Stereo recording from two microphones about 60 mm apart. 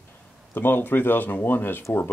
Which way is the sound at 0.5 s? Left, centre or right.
Left.